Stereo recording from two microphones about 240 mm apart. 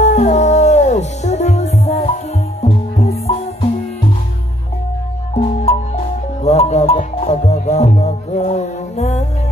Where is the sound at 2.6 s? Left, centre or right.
Left.